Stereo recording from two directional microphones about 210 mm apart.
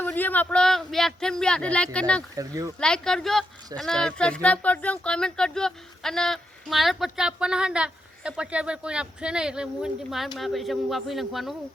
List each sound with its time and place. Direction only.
0.0 s speech: 10° left (ahead or behind)
2.3 s speech: 15° right (ahead or behind)
2.8 s speech: 5° left (ahead or behind)